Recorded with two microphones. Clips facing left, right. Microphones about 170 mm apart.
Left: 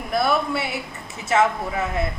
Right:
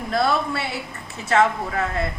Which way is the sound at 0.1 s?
15° left (ahead or behind).